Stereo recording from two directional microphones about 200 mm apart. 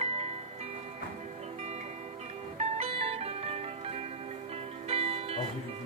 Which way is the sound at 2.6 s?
30° right (ahead or behind).